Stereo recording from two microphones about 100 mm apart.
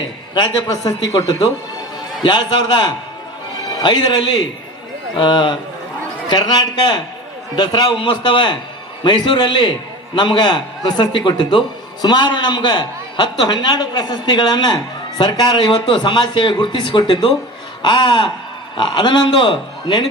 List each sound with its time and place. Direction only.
2.2 s a man's voice: 50° left (ahead or behind)